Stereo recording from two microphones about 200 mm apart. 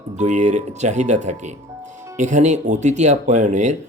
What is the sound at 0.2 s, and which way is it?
Speech, 35° right (ahead or behind).